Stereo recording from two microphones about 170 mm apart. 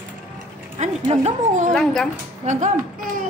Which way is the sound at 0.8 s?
40° right (ahead or behind).